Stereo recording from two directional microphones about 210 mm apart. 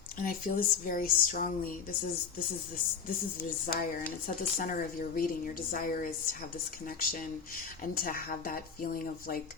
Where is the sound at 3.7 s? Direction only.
45° left (ahead or behind).